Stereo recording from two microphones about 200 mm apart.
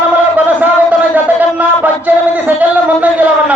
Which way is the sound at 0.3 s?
10° right (ahead or behind).